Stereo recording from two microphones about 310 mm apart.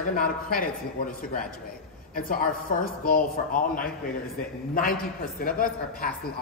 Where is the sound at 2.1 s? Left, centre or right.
Left.